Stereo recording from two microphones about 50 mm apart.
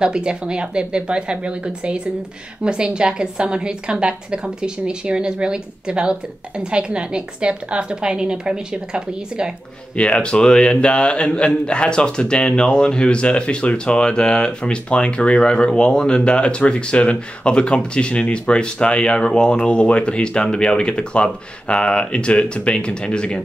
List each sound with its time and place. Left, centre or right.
0.0 s a woman's voice: centre
9.9 s speech: left